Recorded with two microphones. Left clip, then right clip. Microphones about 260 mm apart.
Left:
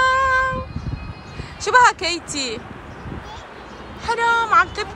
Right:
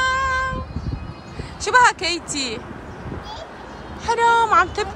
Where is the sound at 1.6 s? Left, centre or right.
Centre.